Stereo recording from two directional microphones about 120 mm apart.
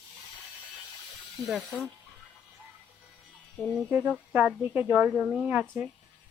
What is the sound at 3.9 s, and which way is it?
A woman's voice, 15° right (ahead or behind).